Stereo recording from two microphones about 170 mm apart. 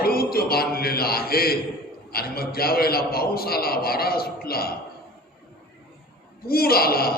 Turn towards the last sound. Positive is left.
turn(degrees=65)  # may be behind; listen again after turning